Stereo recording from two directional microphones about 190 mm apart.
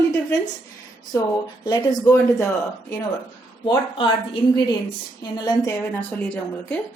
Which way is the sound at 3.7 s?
25° left (ahead or behind).